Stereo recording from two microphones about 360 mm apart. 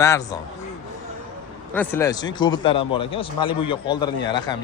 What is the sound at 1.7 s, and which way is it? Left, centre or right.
A man's voice, centre.